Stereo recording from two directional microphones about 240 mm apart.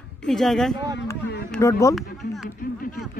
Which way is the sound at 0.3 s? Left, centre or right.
Centre.